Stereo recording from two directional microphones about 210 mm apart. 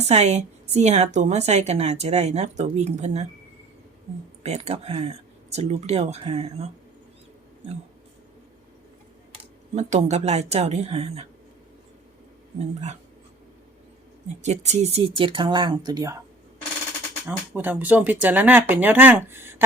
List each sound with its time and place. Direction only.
0.0 s a woman's voice: 30° right (ahead or behind)
4.4 s speech: 30° right (ahead or behind)
9.3 s speech: 30° right (ahead or behind)
12.5 s a woman's voice: 30° right (ahead or behind)
14.4 s speech: 30° right (ahead or behind); by 16.2 s 15° right (ahead or behind)
17.2 s speech: 10° right (ahead or behind)